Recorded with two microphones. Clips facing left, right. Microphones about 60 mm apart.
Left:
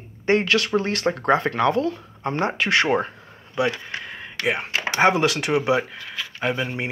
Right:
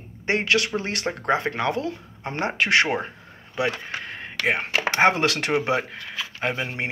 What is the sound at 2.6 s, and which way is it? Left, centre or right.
Speech, right.